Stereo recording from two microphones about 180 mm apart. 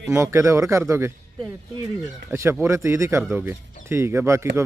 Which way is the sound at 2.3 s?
15° right (ahead or behind).